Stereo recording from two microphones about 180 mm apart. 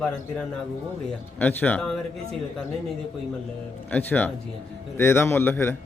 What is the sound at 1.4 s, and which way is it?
Speech, 10° left (ahead or behind).